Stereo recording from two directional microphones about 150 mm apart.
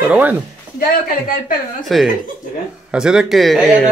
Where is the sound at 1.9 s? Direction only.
Centre (ahead or behind).